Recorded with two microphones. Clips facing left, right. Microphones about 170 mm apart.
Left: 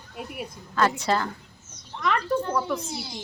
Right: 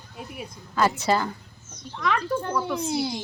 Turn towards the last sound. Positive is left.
turn(degrees=-65)  # may be behind; listen again after turning